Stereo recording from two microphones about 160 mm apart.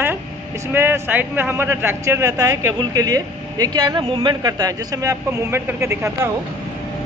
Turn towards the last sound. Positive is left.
turn(degrees=-15)  # may be behind; listen again after turning